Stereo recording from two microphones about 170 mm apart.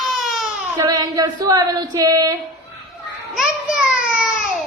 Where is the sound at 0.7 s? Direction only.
20° right (ahead or behind).